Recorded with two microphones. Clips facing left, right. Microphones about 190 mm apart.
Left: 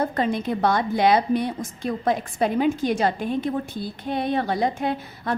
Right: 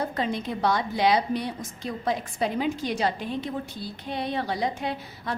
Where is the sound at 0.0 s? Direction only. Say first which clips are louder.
Left 5 dB; 55° left (ahead or behind).